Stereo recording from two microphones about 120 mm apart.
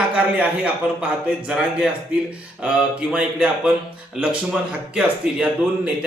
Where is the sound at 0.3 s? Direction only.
10° right (ahead or behind).